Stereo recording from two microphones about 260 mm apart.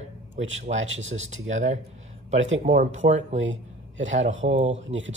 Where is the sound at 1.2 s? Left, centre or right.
Right.